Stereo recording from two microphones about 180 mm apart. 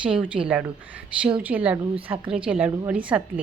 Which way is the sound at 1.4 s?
10° right (ahead or behind).